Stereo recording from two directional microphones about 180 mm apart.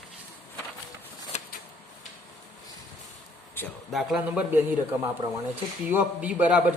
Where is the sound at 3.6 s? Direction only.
10° left (ahead or behind).